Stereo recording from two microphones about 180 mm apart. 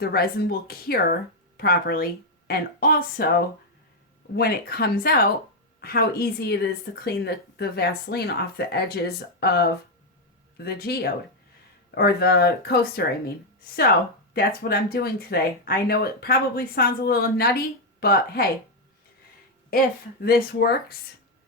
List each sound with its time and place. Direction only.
0.0 s speech: 60° left (ahead or behind)
4.4 s speech: 55° left (ahead or behind)
14.3 s speech: 55° left (ahead or behind)
19.7 s speech: 55° left (ahead or behind)